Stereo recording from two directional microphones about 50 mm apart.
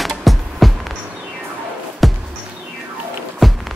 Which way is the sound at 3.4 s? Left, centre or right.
Centre.